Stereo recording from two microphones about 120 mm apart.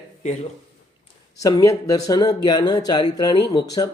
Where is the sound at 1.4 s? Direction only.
30° left (ahead or behind).